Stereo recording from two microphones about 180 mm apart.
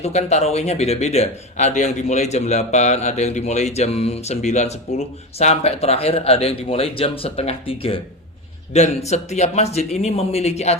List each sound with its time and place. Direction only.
0.0 s speech: 35° left (ahead or behind)